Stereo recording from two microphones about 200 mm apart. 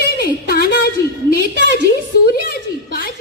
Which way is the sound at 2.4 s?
50° left (ahead or behind).